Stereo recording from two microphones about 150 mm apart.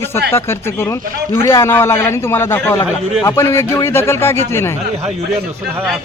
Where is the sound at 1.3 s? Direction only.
20° left (ahead or behind).